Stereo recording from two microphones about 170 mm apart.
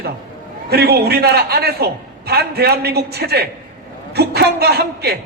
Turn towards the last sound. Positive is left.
turn(degrees=-70)  # may be behind; listen again after turning